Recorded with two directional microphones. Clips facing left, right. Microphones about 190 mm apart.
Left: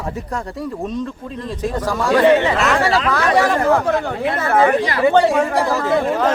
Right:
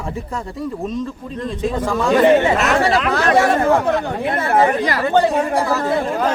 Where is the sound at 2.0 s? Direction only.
20° right (ahead or behind).